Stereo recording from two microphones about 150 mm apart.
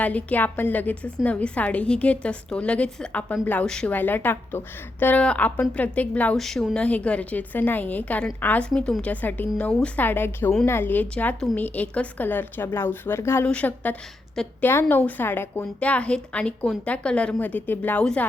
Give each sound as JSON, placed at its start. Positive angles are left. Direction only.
{"t": 0.0, "sound": "a woman's voice", "side_deg": 10}